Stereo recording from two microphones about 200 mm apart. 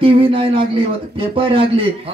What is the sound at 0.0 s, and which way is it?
A man's voice, 25° right (ahead or behind).